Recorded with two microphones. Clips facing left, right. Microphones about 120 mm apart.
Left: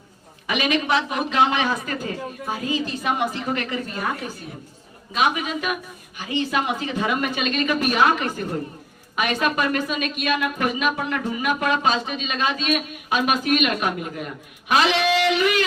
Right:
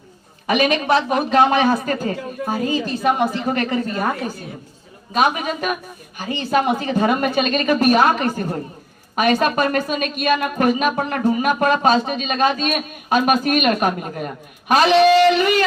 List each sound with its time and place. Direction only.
0.4 s speech: 45° right (ahead or behind)